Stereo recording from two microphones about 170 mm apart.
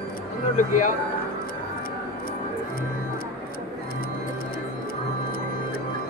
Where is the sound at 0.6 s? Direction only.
50° left (ahead or behind).